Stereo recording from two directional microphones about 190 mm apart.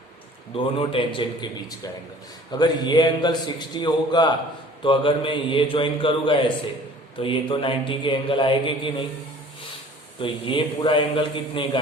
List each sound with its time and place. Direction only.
0.5 s a man's voice: 30° left (ahead or behind)
10.2 s a man's voice: 25° left (ahead or behind)